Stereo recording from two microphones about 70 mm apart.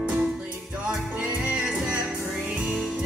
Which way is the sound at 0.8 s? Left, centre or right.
Centre.